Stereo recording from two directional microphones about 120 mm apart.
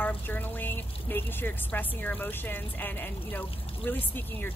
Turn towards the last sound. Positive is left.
turn(degrees=15)  # may be behind; listen again after turning